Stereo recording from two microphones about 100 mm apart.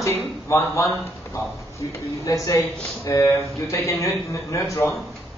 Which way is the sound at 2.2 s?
35° left (ahead or behind).